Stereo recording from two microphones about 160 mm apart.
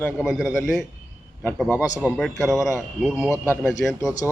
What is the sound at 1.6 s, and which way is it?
A man's voice, 10° right (ahead or behind).